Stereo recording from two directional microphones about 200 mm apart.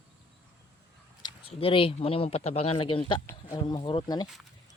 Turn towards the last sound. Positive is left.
turn(degrees=20)  # may be behind; listen again after turning